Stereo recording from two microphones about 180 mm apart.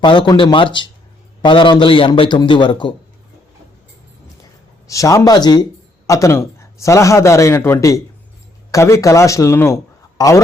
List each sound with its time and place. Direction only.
0.0 s a man's voice: 25° left (ahead or behind)
4.9 s a man's voice: 20° left (ahead or behind)